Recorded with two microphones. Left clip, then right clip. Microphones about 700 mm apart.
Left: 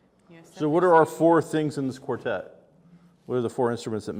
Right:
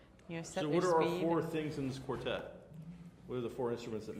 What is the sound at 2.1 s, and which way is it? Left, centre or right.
Speech, left.